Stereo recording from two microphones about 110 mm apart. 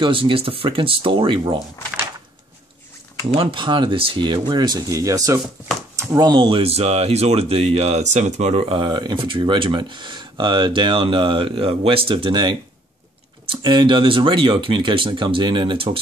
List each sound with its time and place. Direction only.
0.0 s speech: 55° right (ahead or behind)
3.3 s speech: 50° right (ahead or behind); by 6.3 s 35° right (ahead or behind)
6.3 s speech: 50° right (ahead or behind)
8.8 s speech: 40° right (ahead or behind)